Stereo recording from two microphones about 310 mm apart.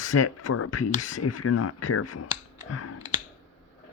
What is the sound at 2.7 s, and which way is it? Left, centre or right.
Clicking, left.